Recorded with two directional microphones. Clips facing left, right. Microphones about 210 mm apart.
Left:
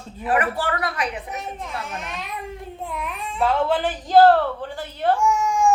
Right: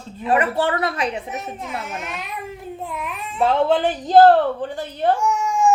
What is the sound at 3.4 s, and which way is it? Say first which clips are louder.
A woman's voice: right 3 dB; 20° right (ahead or behind).